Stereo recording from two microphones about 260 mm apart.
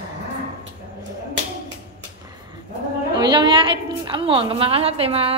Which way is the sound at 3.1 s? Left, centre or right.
Centre.